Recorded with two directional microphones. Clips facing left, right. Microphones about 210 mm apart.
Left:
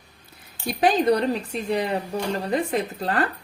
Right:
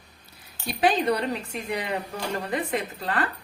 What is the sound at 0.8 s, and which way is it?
A woman's voice, 40° left (ahead or behind).